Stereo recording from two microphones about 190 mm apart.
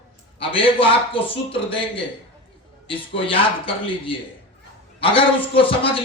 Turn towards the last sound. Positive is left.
turn(degrees=30)  # may be behind; listen again after turning